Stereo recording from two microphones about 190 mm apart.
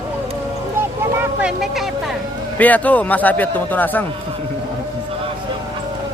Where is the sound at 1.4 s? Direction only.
Centre (ahead or behind).